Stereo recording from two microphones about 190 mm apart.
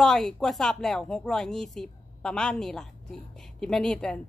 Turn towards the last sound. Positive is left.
turn(degrees=5)  # may be behind; listen again after turning